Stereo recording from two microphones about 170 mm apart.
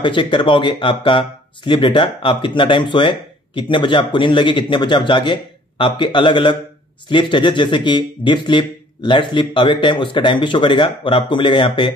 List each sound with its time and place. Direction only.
0.0 s speech: 30° left (ahead or behind)